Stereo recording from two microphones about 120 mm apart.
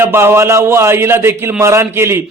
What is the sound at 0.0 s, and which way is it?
A man's voice, 20° right (ahead or behind).